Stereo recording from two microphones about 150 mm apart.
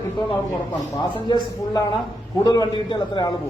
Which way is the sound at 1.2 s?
30° left (ahead or behind).